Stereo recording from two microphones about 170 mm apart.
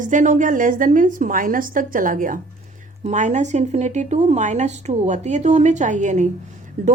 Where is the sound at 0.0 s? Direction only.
50° right (ahead or behind).